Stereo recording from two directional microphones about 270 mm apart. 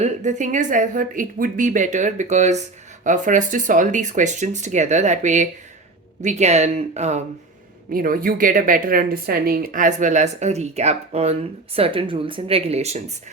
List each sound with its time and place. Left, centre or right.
0.0 s a woman's voice: right